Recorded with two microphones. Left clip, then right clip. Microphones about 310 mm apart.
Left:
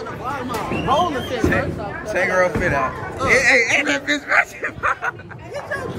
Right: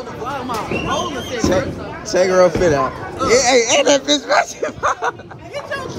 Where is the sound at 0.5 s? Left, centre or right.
Centre.